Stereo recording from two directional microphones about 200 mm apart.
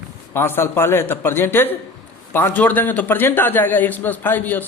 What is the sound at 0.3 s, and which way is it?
A man's voice, 10° left (ahead or behind).